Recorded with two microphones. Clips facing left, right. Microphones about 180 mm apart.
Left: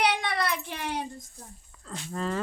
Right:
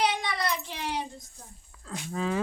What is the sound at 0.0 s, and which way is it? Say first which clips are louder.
Child singing: left 1 dB; 65° left (ahead or behind).